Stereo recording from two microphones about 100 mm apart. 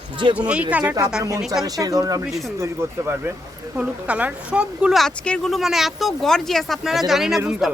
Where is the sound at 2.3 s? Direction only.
Centre (ahead or behind).